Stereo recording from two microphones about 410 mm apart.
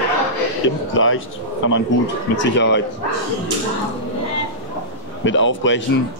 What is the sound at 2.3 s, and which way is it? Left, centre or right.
Speech, left.